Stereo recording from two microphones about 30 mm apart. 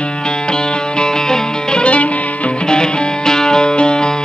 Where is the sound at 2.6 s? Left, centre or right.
Left.